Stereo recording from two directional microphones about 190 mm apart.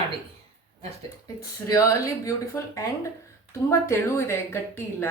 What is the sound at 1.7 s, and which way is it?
A woman's voice, 15° left (ahead or behind).